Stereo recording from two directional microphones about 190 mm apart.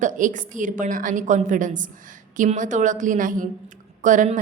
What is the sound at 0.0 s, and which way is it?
A woman's voice, 40° right (ahead or behind).